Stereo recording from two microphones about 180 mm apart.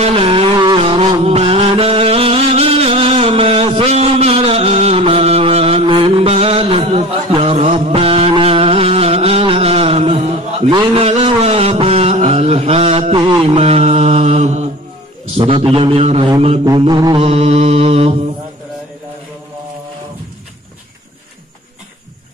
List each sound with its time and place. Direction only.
0.0 s music: 30° right (ahead or behind)
11.1 s a sound: 35° right (ahead or behind)
16.3 s mantra: 30° right (ahead or behind)